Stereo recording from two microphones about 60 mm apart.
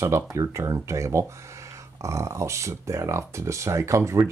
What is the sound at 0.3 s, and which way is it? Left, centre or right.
Speech, right.